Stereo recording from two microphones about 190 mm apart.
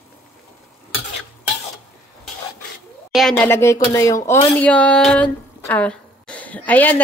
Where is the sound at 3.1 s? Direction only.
Centre (ahead or behind).